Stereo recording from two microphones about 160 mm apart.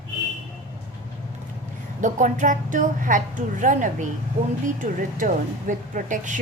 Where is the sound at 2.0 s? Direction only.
50° right (ahead or behind).